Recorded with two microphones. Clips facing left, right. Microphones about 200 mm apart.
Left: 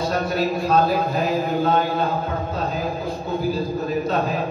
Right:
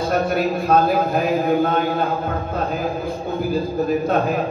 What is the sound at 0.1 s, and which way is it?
A man's voice, 50° right (ahead or behind).